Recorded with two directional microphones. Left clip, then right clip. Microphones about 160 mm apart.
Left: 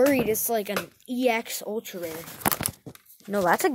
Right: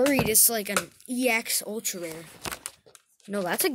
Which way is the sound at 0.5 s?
10° right (ahead or behind).